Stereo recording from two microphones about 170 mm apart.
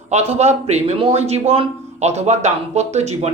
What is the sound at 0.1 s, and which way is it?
Speech, 40° right (ahead or behind).